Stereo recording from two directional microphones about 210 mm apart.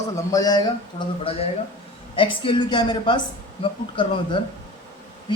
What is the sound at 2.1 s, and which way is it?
A man's voice, 25° left (ahead or behind).